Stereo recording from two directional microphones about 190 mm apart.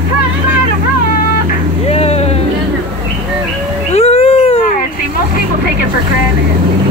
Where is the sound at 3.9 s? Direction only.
30° left (ahead or behind).